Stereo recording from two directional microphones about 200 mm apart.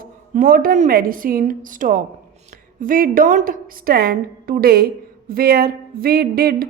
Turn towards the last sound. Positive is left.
turn(degrees=-50)  # may be behind; listen again after turning